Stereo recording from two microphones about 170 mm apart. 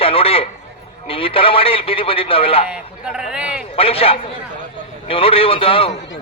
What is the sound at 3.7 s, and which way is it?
A man's voice, 35° left (ahead or behind).